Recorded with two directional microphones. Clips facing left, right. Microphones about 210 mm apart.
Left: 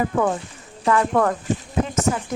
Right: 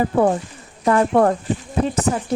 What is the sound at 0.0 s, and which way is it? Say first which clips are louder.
Speech: right 4 dB; 35° right (ahead or behind).